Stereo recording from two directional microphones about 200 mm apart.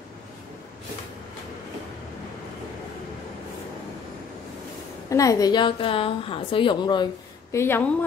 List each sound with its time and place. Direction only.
5.1 s a woman's voice: 15° left (ahead or behind)
7.5 s a woman's voice: 10° left (ahead or behind)